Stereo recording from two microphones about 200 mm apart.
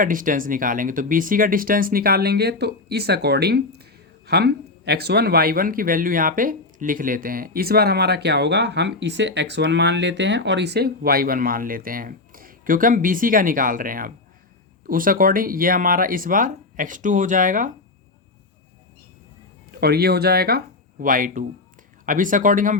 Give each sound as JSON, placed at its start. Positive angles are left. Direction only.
{"t": 0.0, "sound": "speech", "side_deg": -40}
{"t": 19.8, "sound": "speech", "side_deg": -50}